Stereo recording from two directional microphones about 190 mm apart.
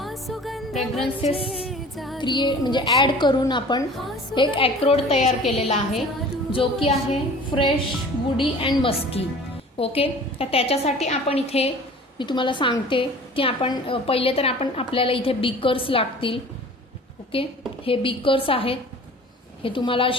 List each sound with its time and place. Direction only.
0.0 s music: centre (ahead or behind)
1.0 s a woman's voice: 30° left (ahead or behind)
1.6 s music: centre (ahead or behind)
2.1 s a woman's voice: 25° left (ahead or behind)